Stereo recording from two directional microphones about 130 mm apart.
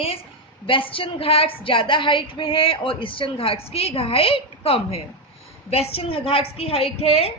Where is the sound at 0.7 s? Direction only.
45° left (ahead or behind).